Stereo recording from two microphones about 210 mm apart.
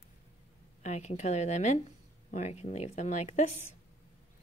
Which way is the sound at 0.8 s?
30° left (ahead or behind).